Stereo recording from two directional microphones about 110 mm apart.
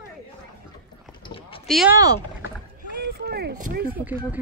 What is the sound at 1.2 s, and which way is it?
Clip-clop, 55° left (ahead or behind).